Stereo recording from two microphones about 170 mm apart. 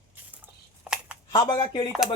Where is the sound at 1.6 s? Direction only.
30° left (ahead or behind).